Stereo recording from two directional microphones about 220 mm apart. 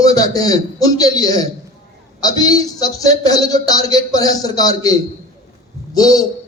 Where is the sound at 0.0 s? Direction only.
15° left (ahead or behind).